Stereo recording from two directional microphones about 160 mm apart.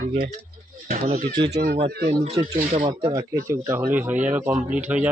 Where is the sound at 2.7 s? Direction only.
35° right (ahead or behind).